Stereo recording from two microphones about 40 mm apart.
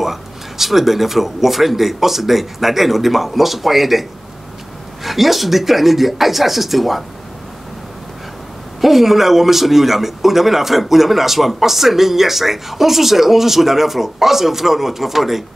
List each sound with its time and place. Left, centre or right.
0.0 s speech: centre
8.8 s speech: centre